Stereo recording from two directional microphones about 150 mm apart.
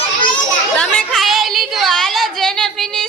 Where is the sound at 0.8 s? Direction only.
5° left (ahead or behind).